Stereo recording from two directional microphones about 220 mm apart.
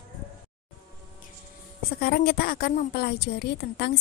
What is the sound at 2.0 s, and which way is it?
Speech, 45° left (ahead or behind).